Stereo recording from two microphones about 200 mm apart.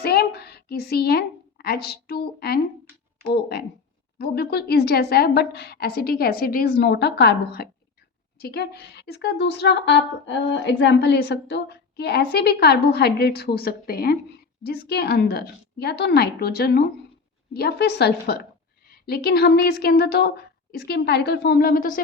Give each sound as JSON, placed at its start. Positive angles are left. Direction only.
{"t": 0.0, "sound": "a woman's voice", "side_deg": 50}